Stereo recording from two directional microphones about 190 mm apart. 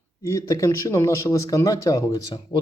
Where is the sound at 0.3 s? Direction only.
15° left (ahead or behind).